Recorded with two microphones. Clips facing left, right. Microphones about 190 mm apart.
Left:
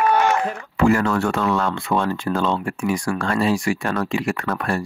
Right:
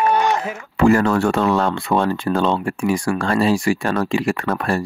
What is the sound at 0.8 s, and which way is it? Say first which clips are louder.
Speech: right 3 dB; 35° right (ahead or behind).